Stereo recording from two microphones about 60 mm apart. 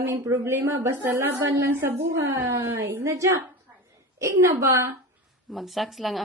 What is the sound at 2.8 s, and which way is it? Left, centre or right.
A woman's voice, right.